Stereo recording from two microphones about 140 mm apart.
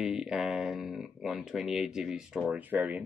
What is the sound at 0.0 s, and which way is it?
Speech, 5° right (ahead or behind).